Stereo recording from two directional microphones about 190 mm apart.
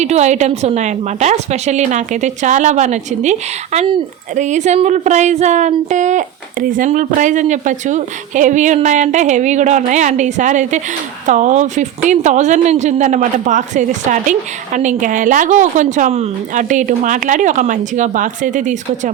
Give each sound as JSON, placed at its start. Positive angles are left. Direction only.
{"t": 0.0, "sound": "speech", "side_deg": -35}